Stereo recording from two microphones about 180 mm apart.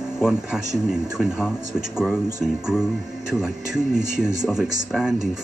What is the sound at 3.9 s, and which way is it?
Speech, 40° right (ahead or behind).